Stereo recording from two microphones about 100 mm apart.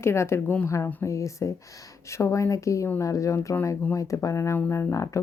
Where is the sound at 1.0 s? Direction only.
30° left (ahead or behind).